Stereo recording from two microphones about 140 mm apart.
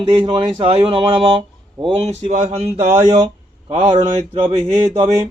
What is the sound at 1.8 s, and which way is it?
Speech, 45° right (ahead or behind).